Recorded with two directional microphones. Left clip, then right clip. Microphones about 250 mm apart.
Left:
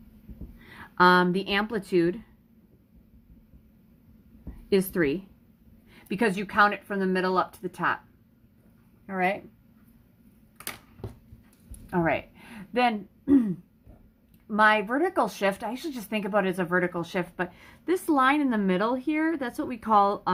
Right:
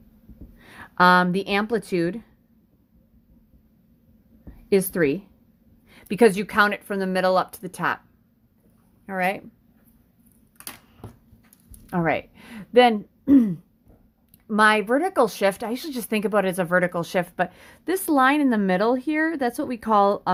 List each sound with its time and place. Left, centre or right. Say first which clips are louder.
0.6 s speech: right 3 dB; right
4.7 s a woman's voice: right 4 dB; right
9.0 s speech: right 2 dB; right
11.9 s speech: right 2 dB; right